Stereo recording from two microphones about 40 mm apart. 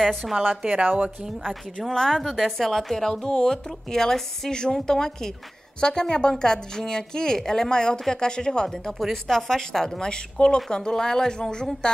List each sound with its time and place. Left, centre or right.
0.6 s speech: right
1.4 s a woman's voice: centre
2.2 s a woman's voice: centre; by 12.0 s left